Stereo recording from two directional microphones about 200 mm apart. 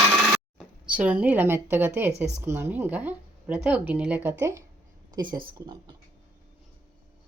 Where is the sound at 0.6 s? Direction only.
5° right (ahead or behind); by 5.5 s 20° right (ahead or behind).